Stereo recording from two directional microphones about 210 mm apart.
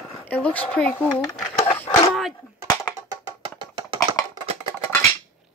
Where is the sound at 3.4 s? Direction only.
20° right (ahead or behind).